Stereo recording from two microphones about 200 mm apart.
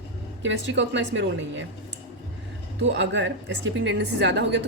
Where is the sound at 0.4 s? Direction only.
70° right (ahead or behind).